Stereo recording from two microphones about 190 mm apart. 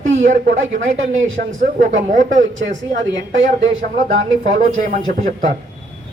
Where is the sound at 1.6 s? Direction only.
40° right (ahead or behind).